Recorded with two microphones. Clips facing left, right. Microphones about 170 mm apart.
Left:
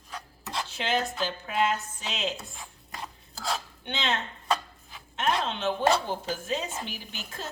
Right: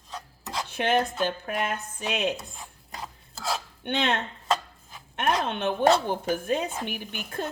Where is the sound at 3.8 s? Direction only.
55° right (ahead or behind).